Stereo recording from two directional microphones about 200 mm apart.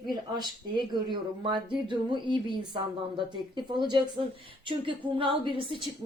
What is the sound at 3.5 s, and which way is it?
A woman's voice, 20° right (ahead or behind).